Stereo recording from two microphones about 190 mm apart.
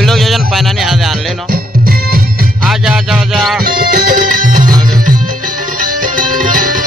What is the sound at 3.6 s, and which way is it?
Music, 50° right (ahead or behind).